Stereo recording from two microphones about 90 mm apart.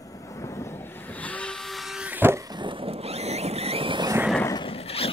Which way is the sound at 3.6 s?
85° right.